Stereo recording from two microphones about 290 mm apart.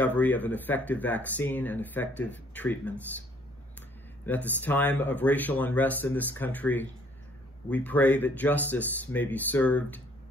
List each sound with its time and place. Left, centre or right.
0.0 s speech: centre
4.5 s speech: centre